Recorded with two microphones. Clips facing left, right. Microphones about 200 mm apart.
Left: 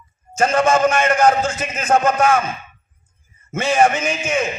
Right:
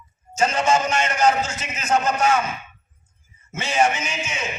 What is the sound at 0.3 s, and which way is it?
A man's voice, 55° left (ahead or behind).